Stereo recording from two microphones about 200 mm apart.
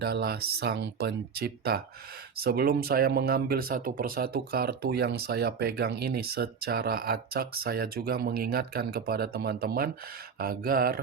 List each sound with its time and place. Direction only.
0.0 s speech: 55° right (ahead or behind)